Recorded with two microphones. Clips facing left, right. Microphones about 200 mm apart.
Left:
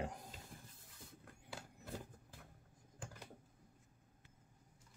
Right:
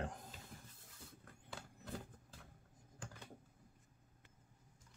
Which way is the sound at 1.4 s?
5° left (ahead or behind).